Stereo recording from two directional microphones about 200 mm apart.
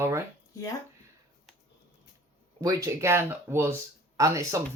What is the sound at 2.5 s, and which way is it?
Speech, 15° right (ahead or behind).